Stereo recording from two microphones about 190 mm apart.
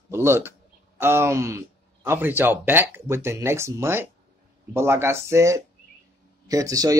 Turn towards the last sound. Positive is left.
turn(degrees=-20)  # may be behind; listen again after turning